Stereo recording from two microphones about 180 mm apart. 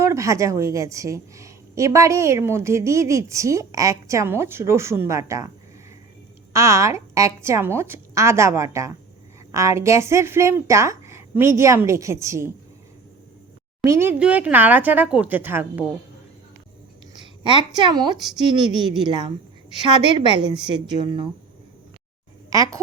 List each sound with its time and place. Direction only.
0.0 s a woman's voice: 15° right (ahead or behind)
6.5 s a woman's voice: 15° right (ahead or behind)
13.8 s a woman's voice: 15° right (ahead or behind)
17.4 s a woman's voice: 25° right (ahead or behind)
22.4 s speech: 20° right (ahead or behind)